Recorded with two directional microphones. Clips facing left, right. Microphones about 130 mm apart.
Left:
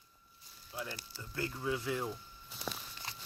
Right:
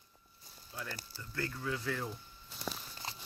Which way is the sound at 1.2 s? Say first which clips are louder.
Left 1 dB; 20° left (ahead or behind).